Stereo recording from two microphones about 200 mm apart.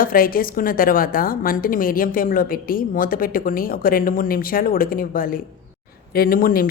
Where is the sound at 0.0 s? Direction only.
45° left (ahead or behind).